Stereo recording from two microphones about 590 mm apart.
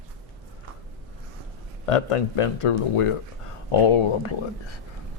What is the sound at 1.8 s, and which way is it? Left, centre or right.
Speech, left.